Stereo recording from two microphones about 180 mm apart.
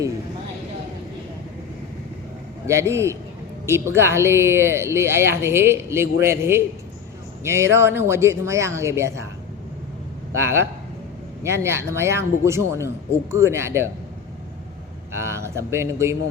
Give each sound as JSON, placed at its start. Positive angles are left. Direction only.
{"t": 2.6, "sound": "speech", "side_deg": -15}
{"t": 10.3, "sound": "speech", "side_deg": -15}
{"t": 15.1, "sound": "speech", "side_deg": -15}